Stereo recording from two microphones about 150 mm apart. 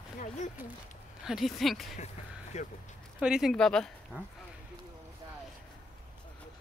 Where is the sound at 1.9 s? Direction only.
50° left (ahead or behind).